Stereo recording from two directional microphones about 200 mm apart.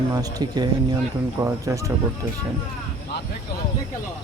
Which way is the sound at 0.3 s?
20° right (ahead or behind).